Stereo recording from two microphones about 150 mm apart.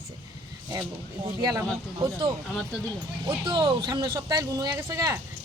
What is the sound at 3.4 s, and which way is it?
A woman's voice, 30° right (ahead or behind).